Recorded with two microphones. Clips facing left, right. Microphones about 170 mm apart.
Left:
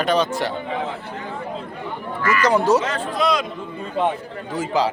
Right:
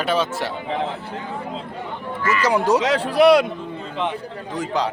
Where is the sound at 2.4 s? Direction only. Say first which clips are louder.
Left 1 dB; 10° right (ahead or behind).